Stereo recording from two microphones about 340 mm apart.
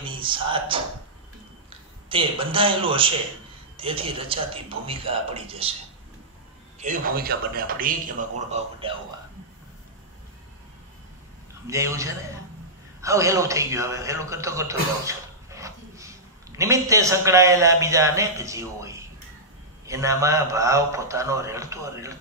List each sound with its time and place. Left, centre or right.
0.0 s speech: centre
2.0 s a man's voice: centre
6.8 s a man's voice: right
11.6 s a man's voice: centre